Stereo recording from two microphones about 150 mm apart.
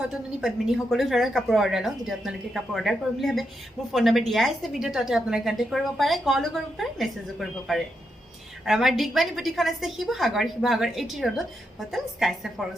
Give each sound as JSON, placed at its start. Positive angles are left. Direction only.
{"t": 0.0, "sound": "a woman's voice", "side_deg": -5}